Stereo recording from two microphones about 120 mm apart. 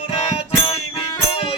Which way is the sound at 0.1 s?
55° left (ahead or behind).